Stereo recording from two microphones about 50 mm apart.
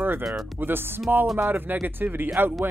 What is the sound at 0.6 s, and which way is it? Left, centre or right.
Speech, right.